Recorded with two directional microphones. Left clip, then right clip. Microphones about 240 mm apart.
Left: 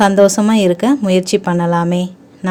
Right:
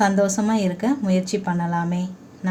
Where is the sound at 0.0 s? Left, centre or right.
Left.